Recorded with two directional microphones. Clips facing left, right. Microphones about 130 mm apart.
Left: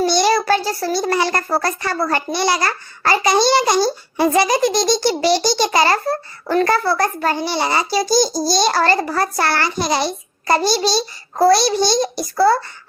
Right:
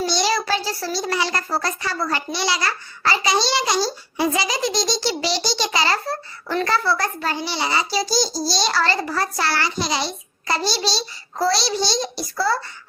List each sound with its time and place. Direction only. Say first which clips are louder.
0.0 s a child's voice: left 6 dB; 55° left (ahead or behind)